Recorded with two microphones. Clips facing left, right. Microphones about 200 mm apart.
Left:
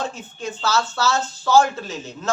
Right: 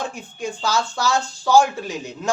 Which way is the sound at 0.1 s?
15° right (ahead or behind).